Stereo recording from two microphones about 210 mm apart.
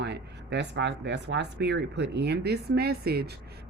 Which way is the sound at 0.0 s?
55° right (ahead or behind).